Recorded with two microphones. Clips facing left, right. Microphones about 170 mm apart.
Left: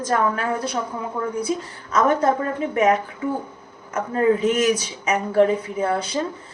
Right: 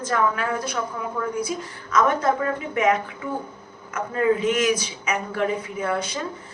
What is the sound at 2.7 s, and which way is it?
Speech, 40° left (ahead or behind).